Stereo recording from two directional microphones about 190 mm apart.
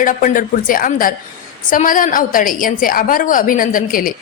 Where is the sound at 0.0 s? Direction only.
45° left (ahead or behind).